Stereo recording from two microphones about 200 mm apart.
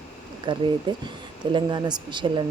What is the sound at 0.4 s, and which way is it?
Speech, 25° right (ahead or behind).